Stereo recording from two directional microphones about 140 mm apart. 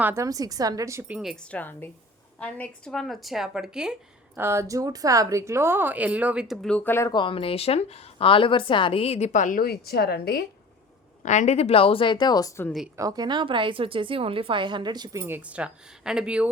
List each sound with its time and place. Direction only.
0.0 s a woman's voice: 20° right (ahead or behind); by 1.5 s centre (ahead or behind)
1.5 s a woman's voice: 10° left (ahead or behind); by 3.9 s 5° right (ahead or behind)
4.4 s speech: 20° right (ahead or behind); by 7.1 s 15° left (ahead or behind)
7.1 s speech: 35° left (ahead or behind); by 10.3 s 90° left
11.2 s a woman's voice: 60° left (ahead or behind); by 12.6 s 25° left (ahead or behind)
13.0 s speech: 25° right (ahead or behind)
15.2 s speech: 10° right (ahead or behind)